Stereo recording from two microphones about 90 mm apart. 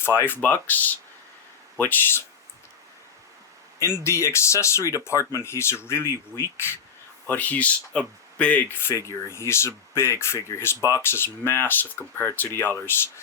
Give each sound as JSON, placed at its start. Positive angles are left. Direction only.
{"t": 0.0, "sound": "speech", "side_deg": 25}
{"t": 3.8, "sound": "speech", "side_deg": 30}
{"t": 7.3, "sound": "speech", "side_deg": 20}